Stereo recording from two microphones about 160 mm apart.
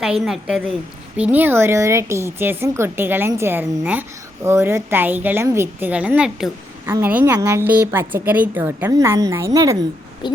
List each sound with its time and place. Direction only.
0.0 s a woman's voice: 5° right (ahead or behind); by 9.7 s 20° right (ahead or behind)
10.2 s owl: 30° left (ahead or behind)